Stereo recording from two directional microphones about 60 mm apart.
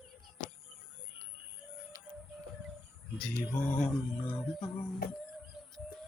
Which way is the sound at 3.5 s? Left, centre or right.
Centre.